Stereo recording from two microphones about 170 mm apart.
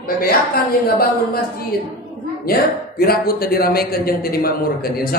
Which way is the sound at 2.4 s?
60° left (ahead or behind).